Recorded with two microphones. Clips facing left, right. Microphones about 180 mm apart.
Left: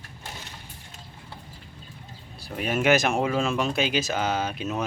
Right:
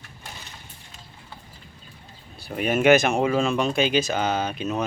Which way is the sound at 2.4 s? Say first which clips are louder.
Right 4 dB; centre (ahead or behind).